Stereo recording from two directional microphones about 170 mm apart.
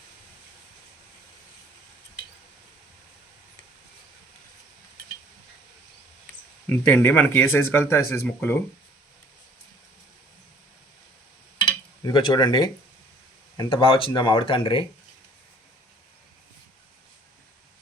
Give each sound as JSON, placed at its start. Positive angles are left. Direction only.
{"t": 6.7, "sound": "speech", "side_deg": 10}
{"t": 11.6, "sound": "dishes", "side_deg": 30}
{"t": 13.6, "sound": "speech", "side_deg": 30}